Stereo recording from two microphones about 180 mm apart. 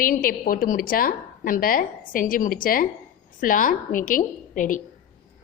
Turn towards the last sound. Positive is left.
turn(degrees=45)  # may be behind; listen again after turning